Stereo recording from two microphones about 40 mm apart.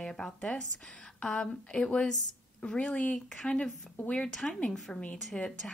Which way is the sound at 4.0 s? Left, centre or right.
Left.